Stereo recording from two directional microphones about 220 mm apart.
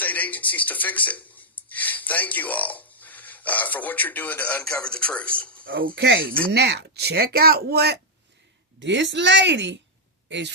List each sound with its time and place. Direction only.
0.0 s a man's voice: 5° left (ahead or behind)
5.8 s speech: 45° right (ahead or behind)